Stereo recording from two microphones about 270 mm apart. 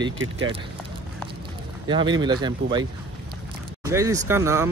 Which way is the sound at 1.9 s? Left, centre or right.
Centre.